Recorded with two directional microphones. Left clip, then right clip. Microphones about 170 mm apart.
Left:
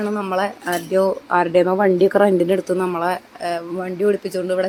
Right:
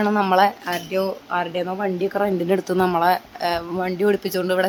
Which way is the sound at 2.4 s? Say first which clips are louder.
Left 2 dB; 15° left (ahead or behind).